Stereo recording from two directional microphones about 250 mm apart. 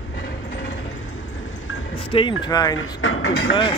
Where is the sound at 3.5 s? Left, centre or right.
Centre.